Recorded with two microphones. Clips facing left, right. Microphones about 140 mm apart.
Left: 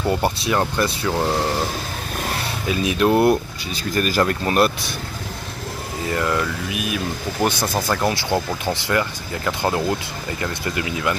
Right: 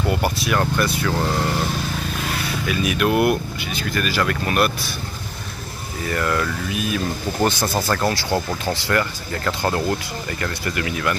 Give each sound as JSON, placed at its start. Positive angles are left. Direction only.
{"t": 0.1, "sound": "speech", "side_deg": 30}
{"t": 2.7, "sound": "speech", "side_deg": 25}
{"t": 6.1, "sound": "speech", "side_deg": 15}